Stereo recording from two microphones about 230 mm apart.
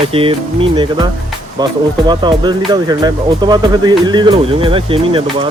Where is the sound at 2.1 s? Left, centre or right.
Centre.